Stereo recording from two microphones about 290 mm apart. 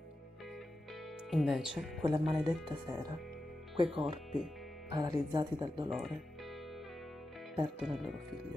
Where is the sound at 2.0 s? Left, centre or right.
Centre.